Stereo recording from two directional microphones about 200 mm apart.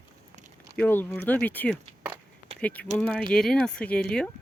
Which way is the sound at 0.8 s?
10° left (ahead or behind).